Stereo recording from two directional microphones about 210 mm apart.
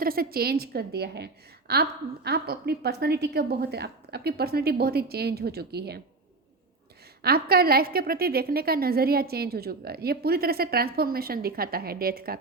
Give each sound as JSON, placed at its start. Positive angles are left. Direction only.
{"t": 0.0, "sound": "a woman's voice", "side_deg": -45}
{"t": 7.2, "sound": "a woman's voice", "side_deg": -45}